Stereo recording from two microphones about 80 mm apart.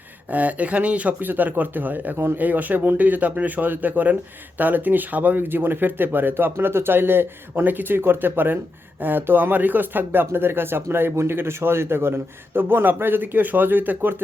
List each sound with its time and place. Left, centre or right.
0.3 s speech: centre